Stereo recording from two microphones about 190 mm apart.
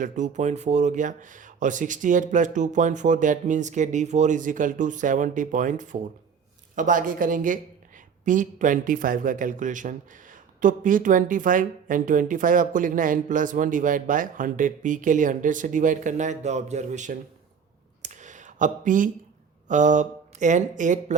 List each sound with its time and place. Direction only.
0.0 s a man's voice: 40° right (ahead or behind)
18.0 s a sound: 40° right (ahead or behind)
19.6 s speech: 40° right (ahead or behind)